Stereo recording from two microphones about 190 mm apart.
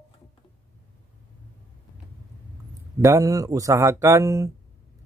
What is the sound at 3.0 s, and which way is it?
Speech, 15° right (ahead or behind).